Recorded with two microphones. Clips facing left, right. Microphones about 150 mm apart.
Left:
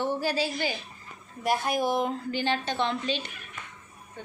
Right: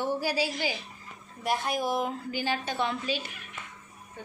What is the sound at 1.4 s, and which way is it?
A woman's voice, centre (ahead or behind).